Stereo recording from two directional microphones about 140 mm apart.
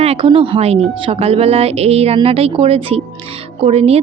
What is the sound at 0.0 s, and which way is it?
Speech, 45° right (ahead or behind).